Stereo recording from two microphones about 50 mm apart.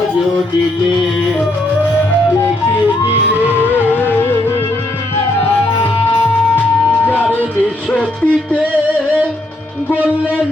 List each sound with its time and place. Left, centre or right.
3.9 s music: left
5.4 s music: left
7.0 s music: left
7.9 s music: left